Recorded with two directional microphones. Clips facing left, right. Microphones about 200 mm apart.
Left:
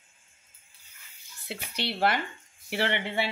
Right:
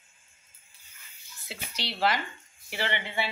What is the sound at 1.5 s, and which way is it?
Speech, 55° left (ahead or behind).